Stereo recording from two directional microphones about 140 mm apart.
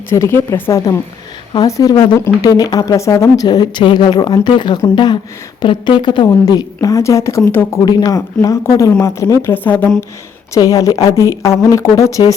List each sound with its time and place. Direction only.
0.1 s a woman's voice: 20° left (ahead or behind)
10.5 s a woman's voice: 25° left (ahead or behind)